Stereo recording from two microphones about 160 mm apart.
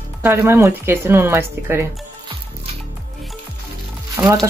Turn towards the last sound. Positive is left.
turn(degrees=-20)  # may be behind; listen again after turning